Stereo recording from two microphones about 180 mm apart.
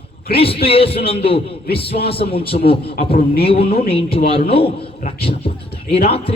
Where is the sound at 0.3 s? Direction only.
30° left (ahead or behind).